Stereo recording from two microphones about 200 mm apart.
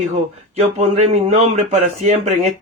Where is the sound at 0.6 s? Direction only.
30° right (ahead or behind).